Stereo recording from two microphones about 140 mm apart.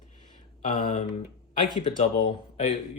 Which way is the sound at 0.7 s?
65° left (ahead or behind).